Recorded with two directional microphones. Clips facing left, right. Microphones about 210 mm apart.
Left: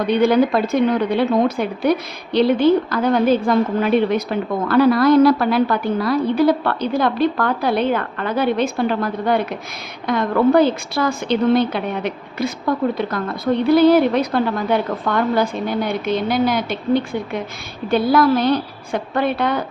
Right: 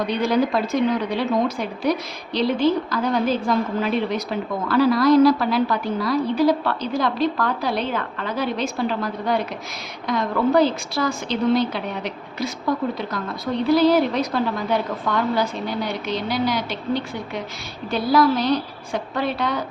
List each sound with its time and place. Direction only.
0.1 s a woman's voice: 55° left (ahead or behind)